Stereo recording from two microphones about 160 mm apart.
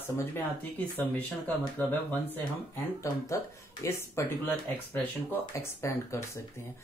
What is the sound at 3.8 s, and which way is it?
Speech, 20° left (ahead or behind).